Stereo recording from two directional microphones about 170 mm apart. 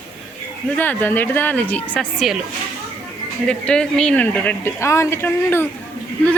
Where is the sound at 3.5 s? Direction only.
5° left (ahead or behind).